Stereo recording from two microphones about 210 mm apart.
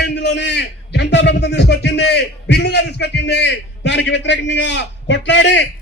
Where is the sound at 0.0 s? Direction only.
55° left (ahead or behind).